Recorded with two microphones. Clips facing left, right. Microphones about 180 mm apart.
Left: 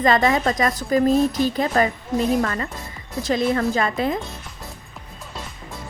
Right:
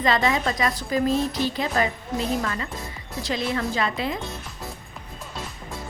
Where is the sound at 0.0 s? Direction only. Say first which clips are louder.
Left 4 dB; 50° left (ahead or behind).